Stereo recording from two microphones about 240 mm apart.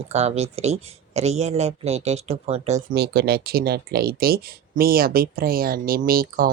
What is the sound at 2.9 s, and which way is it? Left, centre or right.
Speech, right.